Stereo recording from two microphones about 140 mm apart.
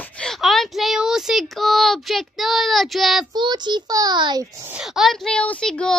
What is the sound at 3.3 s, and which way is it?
A child's voice, 30° right (ahead or behind).